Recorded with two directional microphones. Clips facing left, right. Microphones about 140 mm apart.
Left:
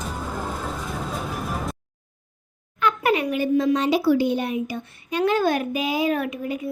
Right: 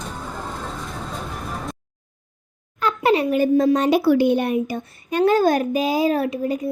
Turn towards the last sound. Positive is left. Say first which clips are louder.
# right 4 dB
turn(degrees=-35)  # may be behind; listen again after turning